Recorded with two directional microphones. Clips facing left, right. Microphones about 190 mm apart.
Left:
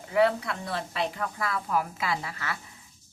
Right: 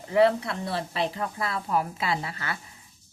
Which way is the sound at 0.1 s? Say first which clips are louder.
Right 3 dB; 35° right (ahead or behind).